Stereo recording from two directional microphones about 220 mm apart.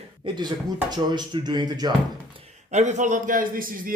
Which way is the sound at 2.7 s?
35° right (ahead or behind).